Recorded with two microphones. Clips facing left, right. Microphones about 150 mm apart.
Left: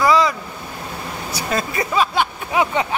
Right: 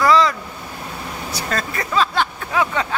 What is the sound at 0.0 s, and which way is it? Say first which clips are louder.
Boat: right 1 dB; 10° left (ahead or behind).